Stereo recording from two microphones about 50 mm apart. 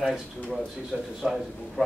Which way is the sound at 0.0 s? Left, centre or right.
Centre.